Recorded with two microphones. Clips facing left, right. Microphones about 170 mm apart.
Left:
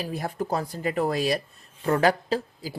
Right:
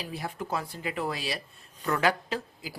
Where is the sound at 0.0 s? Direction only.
45° left (ahead or behind).